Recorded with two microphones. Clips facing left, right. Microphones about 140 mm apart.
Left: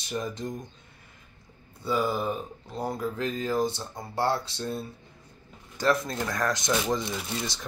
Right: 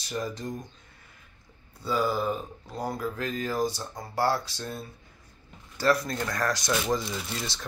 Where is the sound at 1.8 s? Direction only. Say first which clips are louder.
Even; 20° left (ahead or behind).